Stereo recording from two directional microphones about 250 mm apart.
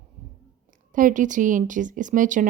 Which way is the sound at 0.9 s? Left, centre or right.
Right.